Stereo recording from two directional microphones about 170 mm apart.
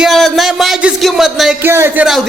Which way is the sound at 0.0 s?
Centre (ahead or behind).